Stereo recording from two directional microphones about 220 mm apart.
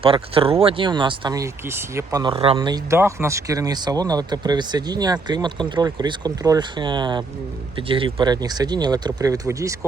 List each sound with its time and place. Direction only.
0.0 s speech: 25° right (ahead or behind)